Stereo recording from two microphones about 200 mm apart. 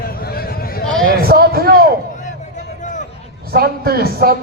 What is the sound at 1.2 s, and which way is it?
Speech, 50° right (ahead or behind).